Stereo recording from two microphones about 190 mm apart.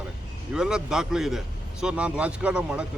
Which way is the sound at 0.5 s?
5° right (ahead or behind).